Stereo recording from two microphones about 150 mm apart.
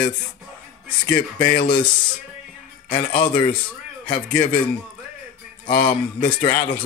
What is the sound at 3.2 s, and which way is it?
Speech, 30° left (ahead or behind).